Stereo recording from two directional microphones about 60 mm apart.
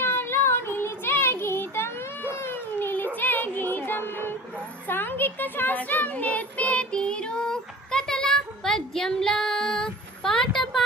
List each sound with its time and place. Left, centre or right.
0.0 s child singing: left
2.7 s cat: left
3.2 s music: left
4.9 s child singing: left; by 10.8 s centre